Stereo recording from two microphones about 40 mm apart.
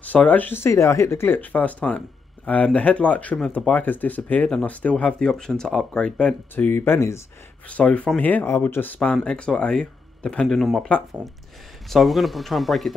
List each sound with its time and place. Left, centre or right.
0.0 s speech: left
0.5 s speech: left
1.4 s speech: left
4.6 s speech: left
5.4 s speech: centre
6.5 s speech: left
7.6 s speech: left
8.2 s speech: left
8.5 s speech: left
9.2 s speech: left
10.4 s speech: centre
11.9 s speech: centre